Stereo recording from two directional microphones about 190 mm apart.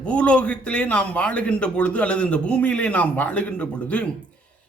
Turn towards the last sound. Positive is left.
turn(degrees=5)  # may be behind; listen again after turning